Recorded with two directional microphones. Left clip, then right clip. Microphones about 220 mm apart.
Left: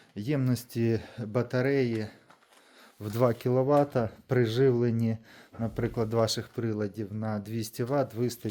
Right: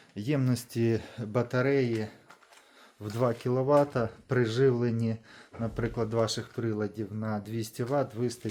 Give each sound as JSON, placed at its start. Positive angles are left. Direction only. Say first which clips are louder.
{"t": 0.2, "sound": "speech", "louder": "even", "side_deg": 15}